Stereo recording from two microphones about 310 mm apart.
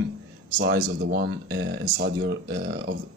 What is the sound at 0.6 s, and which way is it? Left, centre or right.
Speech, right.